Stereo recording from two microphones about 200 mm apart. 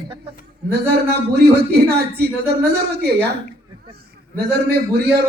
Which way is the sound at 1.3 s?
55° right (ahead or behind).